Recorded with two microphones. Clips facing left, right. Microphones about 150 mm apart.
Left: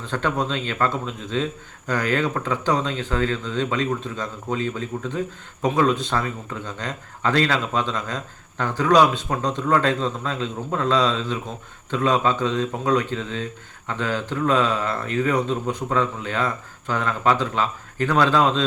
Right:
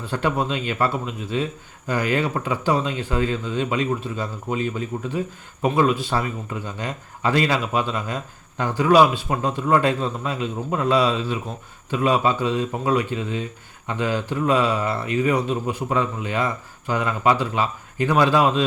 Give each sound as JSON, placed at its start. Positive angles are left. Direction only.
{"t": 0.0, "sound": "speech", "side_deg": -10}